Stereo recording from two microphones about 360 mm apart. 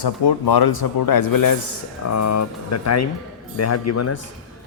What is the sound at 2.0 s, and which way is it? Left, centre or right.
A man's voice, left.